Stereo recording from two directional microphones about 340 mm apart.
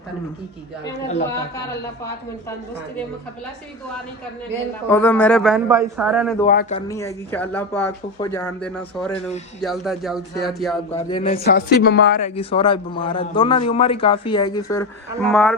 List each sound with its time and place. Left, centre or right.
4.9 s a man's voice: centre
6.4 s a man's voice: left; by 10.8 s centre
10.9 s a man's voice: centre
11.7 s a man's voice: left; by 15.5 s centre